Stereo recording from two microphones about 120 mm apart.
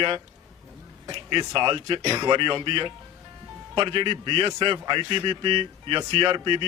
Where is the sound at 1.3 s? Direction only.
40° right (ahead or behind).